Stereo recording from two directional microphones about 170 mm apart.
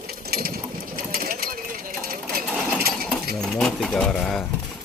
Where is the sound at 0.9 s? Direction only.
60° right (ahead or behind).